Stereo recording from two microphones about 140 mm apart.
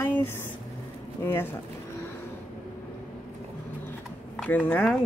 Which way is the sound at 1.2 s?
15° left (ahead or behind).